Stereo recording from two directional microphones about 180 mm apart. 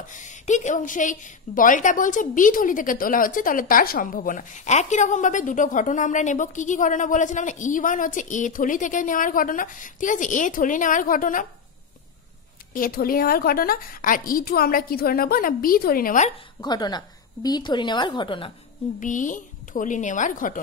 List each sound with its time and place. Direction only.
0.1 s a woman's voice: 45° left (ahead or behind)
12.7 s a woman's voice: 55° left (ahead or behind)
16.6 s a woman's voice: 20° left (ahead or behind)
18.9 s a woman's voice: 45° left (ahead or behind)